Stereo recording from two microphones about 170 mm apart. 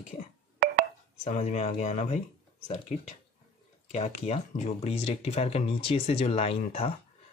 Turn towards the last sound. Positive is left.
turn(degrees=35)  # may be behind; listen again after turning